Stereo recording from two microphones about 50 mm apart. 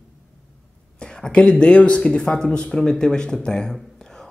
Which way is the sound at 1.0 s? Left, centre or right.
Centre.